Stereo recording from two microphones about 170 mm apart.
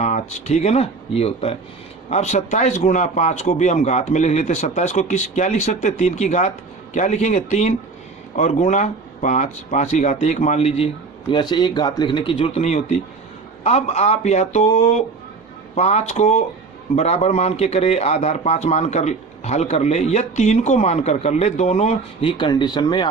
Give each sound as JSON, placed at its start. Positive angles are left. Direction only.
{"t": 0.0, "sound": "a man's voice", "side_deg": 40}